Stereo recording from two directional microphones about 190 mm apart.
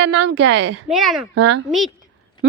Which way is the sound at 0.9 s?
Centre (ahead or behind).